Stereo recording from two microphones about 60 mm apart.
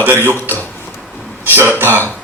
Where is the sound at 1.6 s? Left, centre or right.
Right.